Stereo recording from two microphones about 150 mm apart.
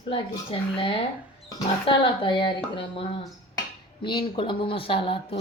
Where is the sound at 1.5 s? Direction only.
30° left (ahead or behind).